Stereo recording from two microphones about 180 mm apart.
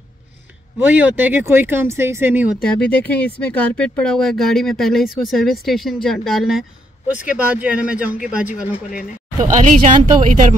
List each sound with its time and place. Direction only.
0.7 s speech: 10° right (ahead or behind)
2.6 s speech: 5° left (ahead or behind)
9.4 s speech: 40° right (ahead or behind)